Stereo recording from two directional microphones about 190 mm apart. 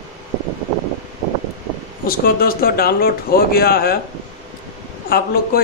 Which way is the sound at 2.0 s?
50° left (ahead or behind).